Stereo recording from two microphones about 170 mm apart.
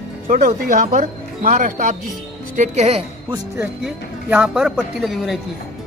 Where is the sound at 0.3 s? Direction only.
50° right (ahead or behind).